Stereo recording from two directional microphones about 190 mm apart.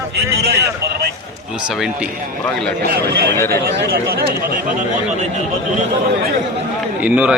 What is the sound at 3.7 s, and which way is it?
Speech, 60° right (ahead or behind).